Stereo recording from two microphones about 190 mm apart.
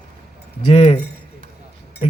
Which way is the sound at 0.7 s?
35° left (ahead or behind).